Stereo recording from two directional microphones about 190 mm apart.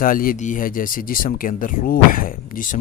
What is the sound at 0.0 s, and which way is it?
Speech, 50° left (ahead or behind).